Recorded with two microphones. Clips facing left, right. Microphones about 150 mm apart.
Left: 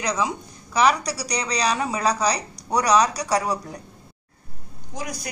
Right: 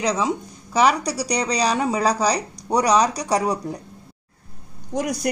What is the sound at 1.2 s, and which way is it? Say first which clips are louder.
Speech: right 3 dB; 30° right (ahead or behind).